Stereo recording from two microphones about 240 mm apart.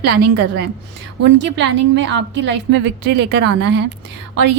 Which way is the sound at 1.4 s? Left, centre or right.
Right.